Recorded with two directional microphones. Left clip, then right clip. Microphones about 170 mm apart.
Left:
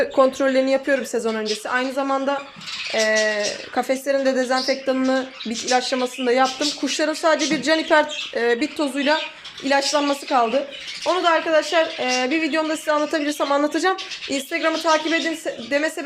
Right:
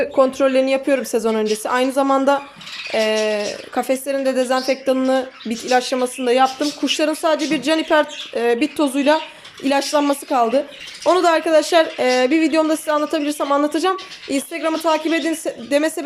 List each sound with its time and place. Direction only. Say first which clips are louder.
0.0 s speech: right 2 dB; 10° right (ahead or behind)